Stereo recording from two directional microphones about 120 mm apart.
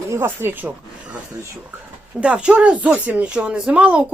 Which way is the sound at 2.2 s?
10° right (ahead or behind).